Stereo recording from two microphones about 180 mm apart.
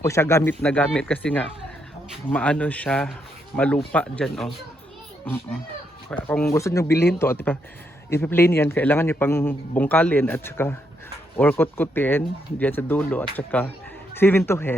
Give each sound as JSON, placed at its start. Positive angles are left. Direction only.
{"t": 0.0, "sound": "a man's voice", "side_deg": 15}
{"t": 6.5, "sound": "a man's voice", "side_deg": 15}